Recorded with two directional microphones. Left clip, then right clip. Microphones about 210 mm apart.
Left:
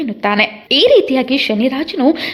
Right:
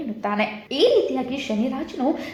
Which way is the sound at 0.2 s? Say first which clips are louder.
Left 10 dB; 40° left (ahead or behind).